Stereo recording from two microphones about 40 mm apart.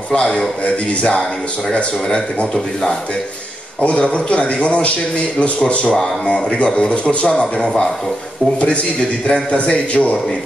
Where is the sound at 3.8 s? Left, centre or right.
Left.